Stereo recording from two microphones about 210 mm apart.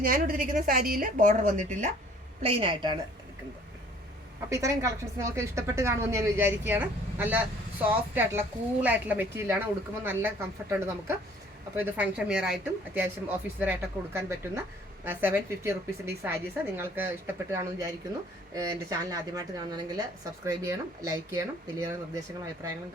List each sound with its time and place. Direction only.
0.0 s a woman's voice: 40° right (ahead or behind); by 3.0 s 25° right (ahead or behind)
4.4 s a woman's voice: 15° right (ahead or behind)